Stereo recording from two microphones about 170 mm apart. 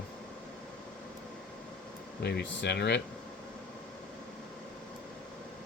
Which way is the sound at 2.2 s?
85° left.